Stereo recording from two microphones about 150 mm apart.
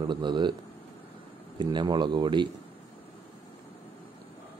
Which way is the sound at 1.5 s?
30° right (ahead or behind).